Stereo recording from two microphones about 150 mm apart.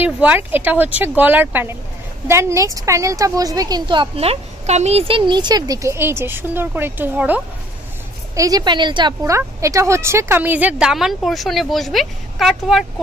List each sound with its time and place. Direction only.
0.0 s a woman's voice: 10° right (ahead or behind)
8.4 s a woman's voice: 25° right (ahead or behind)
9.2 s speech: 20° right (ahead or behind); by 12.8 s centre (ahead or behind)